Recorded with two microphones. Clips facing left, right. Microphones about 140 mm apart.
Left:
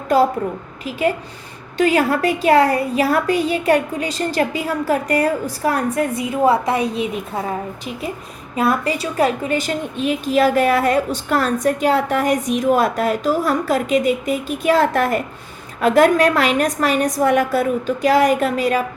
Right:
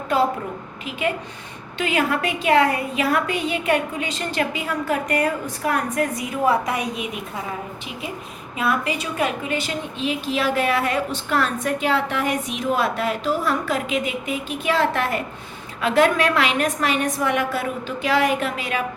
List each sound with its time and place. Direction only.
0.9 s a woman's voice: 35° left (ahead or behind)
8.5 s a woman's voice: 40° left (ahead or behind)